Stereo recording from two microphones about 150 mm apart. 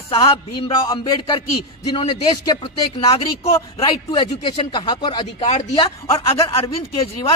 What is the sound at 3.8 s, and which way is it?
Speech, 35° left (ahead or behind).